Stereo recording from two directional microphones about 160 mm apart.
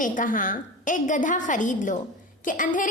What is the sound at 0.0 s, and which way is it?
A woman's voice, 55° left (ahead or behind).